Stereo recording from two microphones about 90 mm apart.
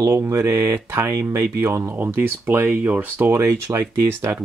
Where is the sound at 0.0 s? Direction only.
30° right (ahead or behind).